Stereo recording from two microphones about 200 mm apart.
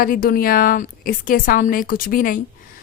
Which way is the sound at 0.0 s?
45° left (ahead or behind).